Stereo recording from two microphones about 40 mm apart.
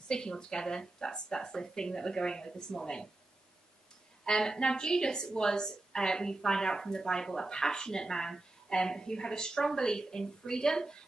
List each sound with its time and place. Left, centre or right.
0.1 s a woman's voice: centre
4.2 s a woman's voice: centre